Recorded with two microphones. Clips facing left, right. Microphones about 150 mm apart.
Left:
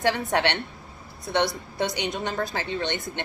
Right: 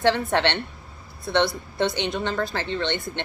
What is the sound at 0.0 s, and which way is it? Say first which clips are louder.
Speech: right 3 dB; 15° left (ahead or behind).